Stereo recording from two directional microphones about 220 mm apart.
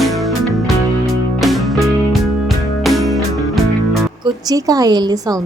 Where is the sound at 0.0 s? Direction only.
Centre (ahead or behind).